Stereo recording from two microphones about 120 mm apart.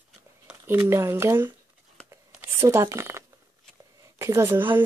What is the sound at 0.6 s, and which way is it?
Speech, 20° right (ahead or behind).